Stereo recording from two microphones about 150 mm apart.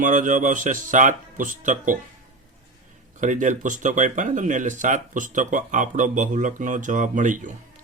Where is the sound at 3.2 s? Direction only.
55° right (ahead or behind).